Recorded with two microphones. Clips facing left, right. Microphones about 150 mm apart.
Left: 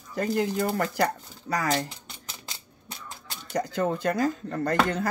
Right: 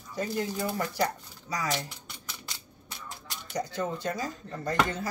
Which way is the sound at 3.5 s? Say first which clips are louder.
Left 5 dB; 55° left (ahead or behind).